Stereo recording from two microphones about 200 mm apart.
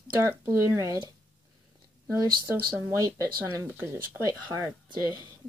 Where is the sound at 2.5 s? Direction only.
15° right (ahead or behind).